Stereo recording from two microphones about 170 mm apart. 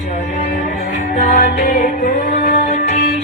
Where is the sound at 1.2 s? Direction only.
40° left (ahead or behind).